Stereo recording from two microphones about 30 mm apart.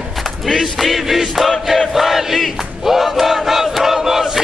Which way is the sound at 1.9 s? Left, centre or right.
Centre.